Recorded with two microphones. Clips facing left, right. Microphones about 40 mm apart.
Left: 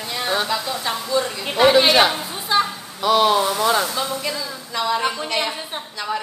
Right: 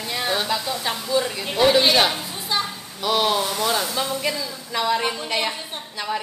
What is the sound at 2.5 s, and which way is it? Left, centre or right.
Speech, left.